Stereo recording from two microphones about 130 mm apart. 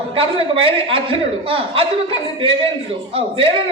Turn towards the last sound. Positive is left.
turn(degrees=-45)  # may be behind; listen again after turning